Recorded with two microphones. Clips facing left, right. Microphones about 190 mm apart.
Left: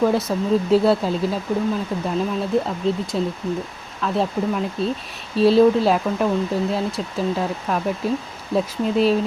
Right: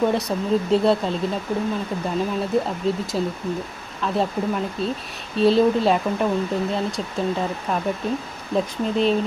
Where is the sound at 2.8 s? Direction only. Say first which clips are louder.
Left 1 dB; centre (ahead or behind).